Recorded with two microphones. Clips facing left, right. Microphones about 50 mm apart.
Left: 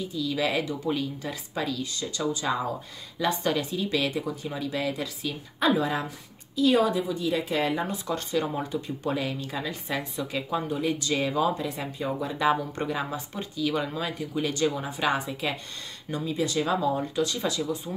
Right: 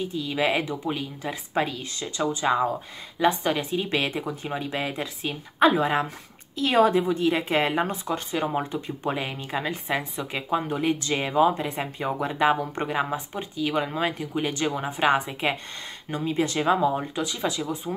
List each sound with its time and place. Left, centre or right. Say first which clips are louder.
0.0 s speech: right 2 dB; right
1.5 s speech: right 4 dB; right
8.1 s speech: right 1 dB; right